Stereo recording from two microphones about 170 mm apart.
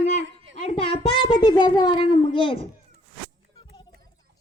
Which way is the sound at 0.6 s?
35° left (ahead or behind).